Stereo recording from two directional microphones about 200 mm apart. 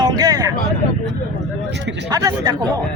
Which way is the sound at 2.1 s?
20° right (ahead or behind).